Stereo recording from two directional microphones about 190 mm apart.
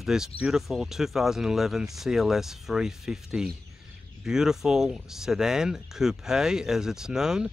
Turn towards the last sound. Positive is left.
turn(degrees=-5)  # may be behind; listen again after turning